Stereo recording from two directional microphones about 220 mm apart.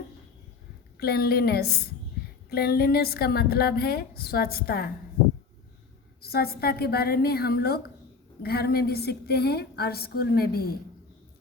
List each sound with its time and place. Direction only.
0.9 s a woman's voice: 45° left (ahead or behind)
6.2 s a woman's voice: 45° left (ahead or behind)